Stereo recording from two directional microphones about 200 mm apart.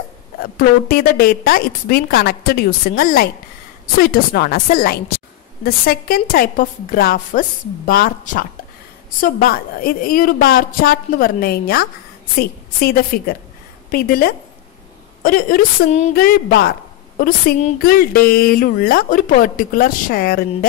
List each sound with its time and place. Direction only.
0.4 s speech: 50° left (ahead or behind)